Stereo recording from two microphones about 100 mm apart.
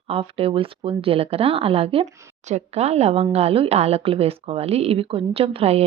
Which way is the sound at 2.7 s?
90° right.